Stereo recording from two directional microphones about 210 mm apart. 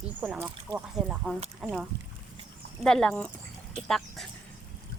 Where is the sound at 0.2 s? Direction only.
5° right (ahead or behind).